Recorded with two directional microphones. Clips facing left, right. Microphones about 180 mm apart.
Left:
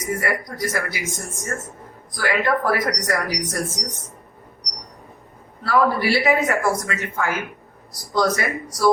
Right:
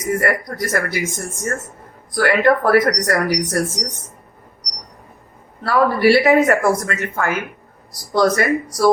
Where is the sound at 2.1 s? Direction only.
60° right (ahead or behind).